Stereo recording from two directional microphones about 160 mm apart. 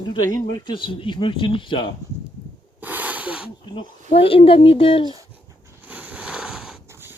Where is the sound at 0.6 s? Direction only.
30° left (ahead or behind).